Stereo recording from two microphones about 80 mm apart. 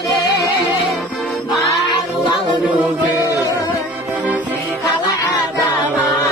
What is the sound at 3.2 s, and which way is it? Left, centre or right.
Music, left.